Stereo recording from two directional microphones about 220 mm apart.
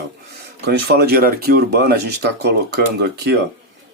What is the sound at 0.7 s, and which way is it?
Speech, 45° right (ahead or behind).